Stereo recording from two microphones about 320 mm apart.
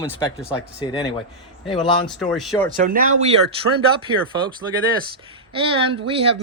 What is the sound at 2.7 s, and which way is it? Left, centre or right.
Speech, right.